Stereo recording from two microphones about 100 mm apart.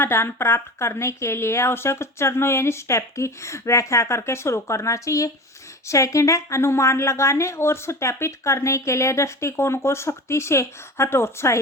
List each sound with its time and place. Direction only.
0.0 s a woman's voice: 25° left (ahead or behind)